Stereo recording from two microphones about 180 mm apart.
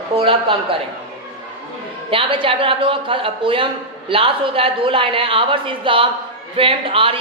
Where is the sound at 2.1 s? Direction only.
30° right (ahead or behind).